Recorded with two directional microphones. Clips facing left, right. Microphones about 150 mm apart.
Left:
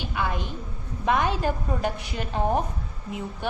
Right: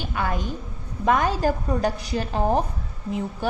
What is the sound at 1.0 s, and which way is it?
A woman's voice, 40° right (ahead or behind).